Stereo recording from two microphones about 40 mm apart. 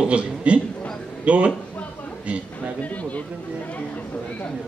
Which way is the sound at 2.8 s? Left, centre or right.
Left.